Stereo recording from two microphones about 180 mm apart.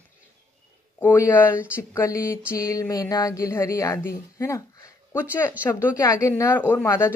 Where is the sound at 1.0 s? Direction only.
15° left (ahead or behind).